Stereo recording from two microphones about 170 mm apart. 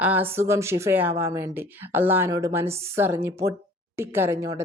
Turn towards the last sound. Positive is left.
turn(degrees=-15)  # may be behind; listen again after turning